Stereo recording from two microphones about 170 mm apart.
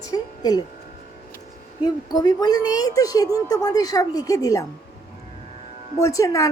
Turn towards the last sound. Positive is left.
turn(degrees=20)  # may be behind; listen again after turning